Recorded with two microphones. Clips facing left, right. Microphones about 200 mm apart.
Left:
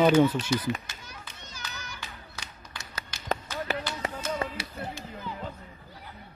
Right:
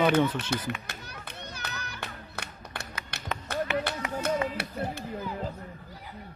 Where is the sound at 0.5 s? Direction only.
60° right (ahead or behind).